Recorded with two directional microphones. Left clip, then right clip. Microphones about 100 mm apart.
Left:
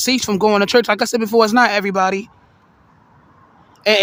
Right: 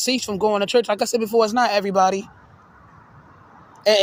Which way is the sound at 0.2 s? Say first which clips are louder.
Left 5 dB; 80° left.